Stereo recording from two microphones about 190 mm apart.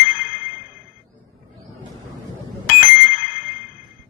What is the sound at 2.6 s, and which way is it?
Bicycle bell, 45° left (ahead or behind).